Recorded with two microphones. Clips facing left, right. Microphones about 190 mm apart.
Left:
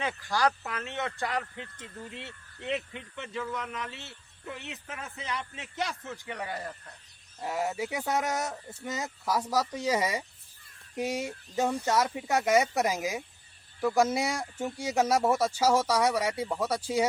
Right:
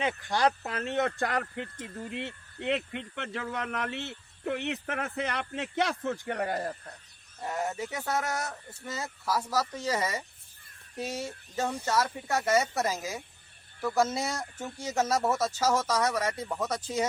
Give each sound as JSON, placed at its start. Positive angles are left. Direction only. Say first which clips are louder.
{"t": 0.0, "sound": "speech", "louder": "right 1 dB", "side_deg": -25}
{"t": 7.4, "sound": "speech", "louder": "left 1 dB", "side_deg": 5}